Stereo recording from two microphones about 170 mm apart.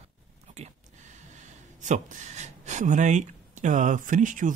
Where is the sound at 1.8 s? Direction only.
45° right (ahead or behind).